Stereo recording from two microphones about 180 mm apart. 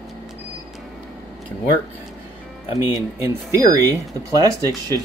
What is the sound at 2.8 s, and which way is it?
Speech, 15° right (ahead or behind).